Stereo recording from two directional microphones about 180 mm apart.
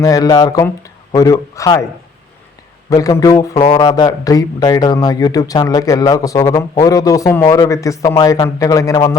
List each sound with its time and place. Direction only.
0.0 s speech: 20° left (ahead or behind)
2.9 s speech: 20° left (ahead or behind)